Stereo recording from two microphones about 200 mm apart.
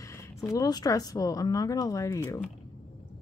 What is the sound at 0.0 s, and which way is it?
Speech, 15° left (ahead or behind).